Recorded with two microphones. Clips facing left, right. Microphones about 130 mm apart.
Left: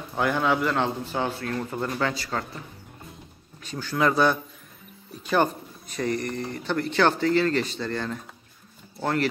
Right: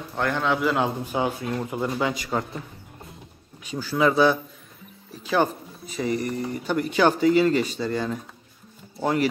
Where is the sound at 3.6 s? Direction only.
10° right (ahead or behind).